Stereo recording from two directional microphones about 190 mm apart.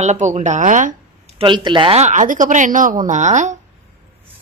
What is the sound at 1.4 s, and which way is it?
A woman's voice, 25° right (ahead or behind).